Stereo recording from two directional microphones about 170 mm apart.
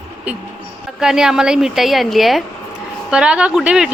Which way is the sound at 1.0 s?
5° right (ahead or behind).